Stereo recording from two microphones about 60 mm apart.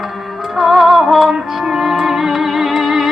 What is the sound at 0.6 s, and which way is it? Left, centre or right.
Music, centre.